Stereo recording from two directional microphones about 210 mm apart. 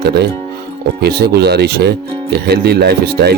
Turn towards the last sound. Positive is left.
turn(degrees=-50)  # may be behind; listen again after turning